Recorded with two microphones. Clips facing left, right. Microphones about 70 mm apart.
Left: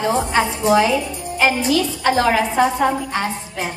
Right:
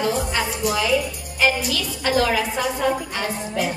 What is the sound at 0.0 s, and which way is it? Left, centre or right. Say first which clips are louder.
A woman's voice: left 5 dB; left.